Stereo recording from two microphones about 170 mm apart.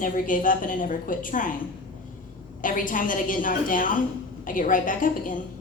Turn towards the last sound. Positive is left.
turn(degrees=50)  # may be behind; listen again after turning